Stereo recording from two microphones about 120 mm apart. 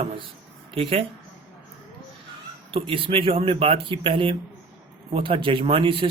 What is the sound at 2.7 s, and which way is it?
Speech, 50° right (ahead or behind).